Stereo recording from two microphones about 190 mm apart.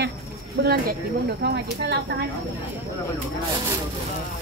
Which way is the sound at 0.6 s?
55° right (ahead or behind).